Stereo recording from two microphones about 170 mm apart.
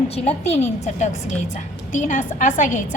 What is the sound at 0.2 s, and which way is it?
A woman's voice, 40° left (ahead or behind).